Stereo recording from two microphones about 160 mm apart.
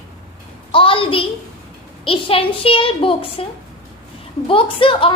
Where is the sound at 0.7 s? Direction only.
35° left (ahead or behind).